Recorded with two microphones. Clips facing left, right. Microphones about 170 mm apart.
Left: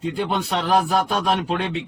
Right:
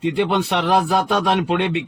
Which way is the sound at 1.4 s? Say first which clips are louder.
Right 4 dB; 70° right (ahead or behind).